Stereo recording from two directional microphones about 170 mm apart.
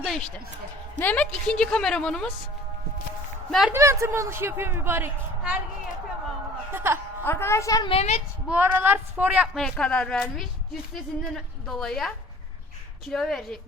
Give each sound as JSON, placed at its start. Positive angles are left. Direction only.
{"t": 0.0, "sound": "a woman's voice", "side_deg": 0}
{"t": 3.7, "sound": "a woman's voice", "side_deg": -15}
{"t": 6.7, "sound": "a woman's voice", "side_deg": -15}
{"t": 7.3, "sound": "a woman's voice", "side_deg": 15}
{"t": 7.9, "sound": "a woman's voice", "side_deg": 35}
{"t": 8.4, "sound": "a woman's voice", "side_deg": -10}